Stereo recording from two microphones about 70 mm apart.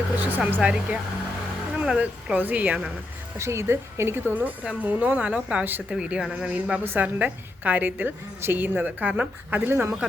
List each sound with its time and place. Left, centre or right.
0.2 s a woman's voice: right
0.6 s a woman's voice: centre
2.0 s a woman's voice: right
3.3 s a woman's voice: right; by 6.8 s centre
6.8 s a woman's voice: right